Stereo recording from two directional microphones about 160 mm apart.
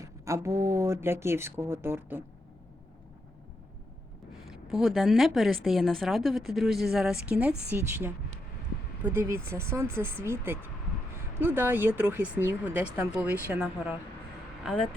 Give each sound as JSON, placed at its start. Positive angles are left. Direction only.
{"t": 0.0, "sound": "speech", "side_deg": -20}
{"t": 4.4, "sound": "a woman's voice", "side_deg": 0}
{"t": 9.1, "sound": "speech", "side_deg": -15}
{"t": 14.6, "sound": "speech", "side_deg": 5}